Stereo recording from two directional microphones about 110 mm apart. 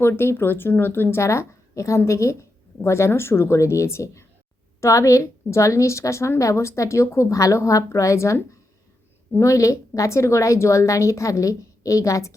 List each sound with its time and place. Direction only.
0.0 s speech: 20° left (ahead or behind)